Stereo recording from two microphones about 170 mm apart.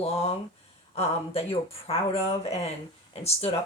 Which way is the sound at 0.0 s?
35° left (ahead or behind).